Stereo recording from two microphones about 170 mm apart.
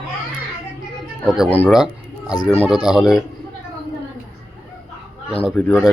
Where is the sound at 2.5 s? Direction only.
10° left (ahead or behind).